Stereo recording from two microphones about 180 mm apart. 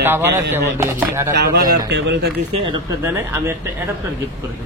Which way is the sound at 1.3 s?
65° right (ahead or behind).